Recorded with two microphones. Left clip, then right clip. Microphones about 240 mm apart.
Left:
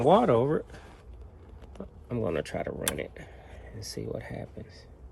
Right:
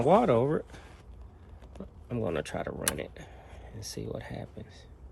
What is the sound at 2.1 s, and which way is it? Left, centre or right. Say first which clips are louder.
Speech: left 2 dB; centre.